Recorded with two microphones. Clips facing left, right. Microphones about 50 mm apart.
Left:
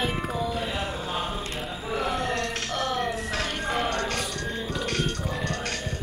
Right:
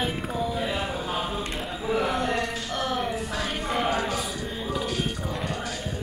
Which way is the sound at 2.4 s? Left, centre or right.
Left.